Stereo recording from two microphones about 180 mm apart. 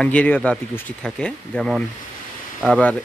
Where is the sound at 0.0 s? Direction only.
10° left (ahead or behind).